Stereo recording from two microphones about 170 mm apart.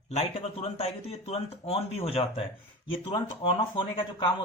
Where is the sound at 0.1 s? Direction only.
35° left (ahead or behind).